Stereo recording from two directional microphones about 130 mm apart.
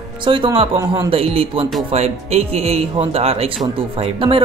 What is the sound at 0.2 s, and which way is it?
Speech, 40° right (ahead or behind).